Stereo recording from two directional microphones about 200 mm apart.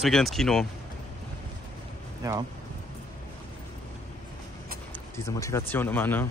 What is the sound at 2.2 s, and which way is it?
Speech, 15° right (ahead or behind).